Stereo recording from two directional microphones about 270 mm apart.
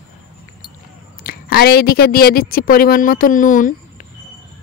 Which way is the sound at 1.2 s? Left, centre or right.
Left.